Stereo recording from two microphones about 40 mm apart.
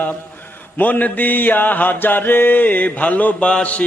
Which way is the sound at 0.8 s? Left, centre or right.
Left.